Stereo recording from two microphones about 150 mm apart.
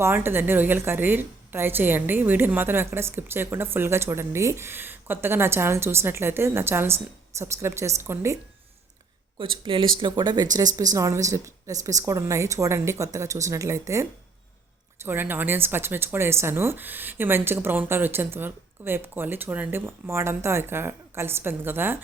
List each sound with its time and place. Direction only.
0.0 s a woman's voice: 15° right (ahead or behind)
9.4 s a woman's voice: 35° right (ahead or behind); by 21.9 s 15° right (ahead or behind)